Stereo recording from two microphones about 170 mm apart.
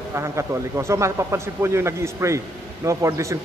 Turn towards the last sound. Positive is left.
turn(degrees=-15)  # may be behind; listen again after turning